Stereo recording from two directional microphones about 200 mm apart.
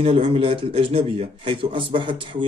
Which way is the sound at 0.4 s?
25° right (ahead or behind).